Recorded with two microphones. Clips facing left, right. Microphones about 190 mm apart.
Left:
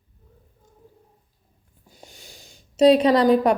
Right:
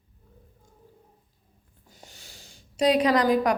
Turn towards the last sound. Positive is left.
turn(degrees=30)  # may be behind; listen again after turning